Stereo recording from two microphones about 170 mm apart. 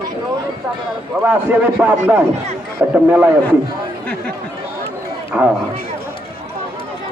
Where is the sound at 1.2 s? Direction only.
10° right (ahead or behind).